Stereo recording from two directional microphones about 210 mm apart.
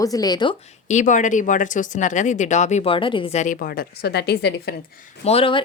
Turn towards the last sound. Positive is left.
turn(degrees=25)  # may be behind; listen again after turning